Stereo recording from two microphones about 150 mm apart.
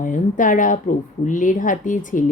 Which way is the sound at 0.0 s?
60° left (ahead or behind).